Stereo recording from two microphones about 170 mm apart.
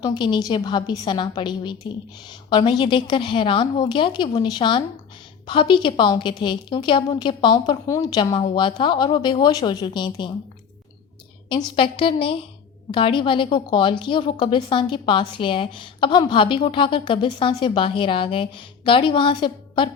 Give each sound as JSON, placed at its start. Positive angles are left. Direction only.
{"t": 0.0, "sound": "a woman's voice", "side_deg": 25}
{"t": 11.4, "sound": "a woman's voice", "side_deg": 30}